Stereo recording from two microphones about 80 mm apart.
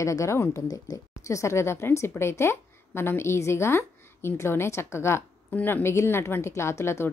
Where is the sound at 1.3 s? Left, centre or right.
Left.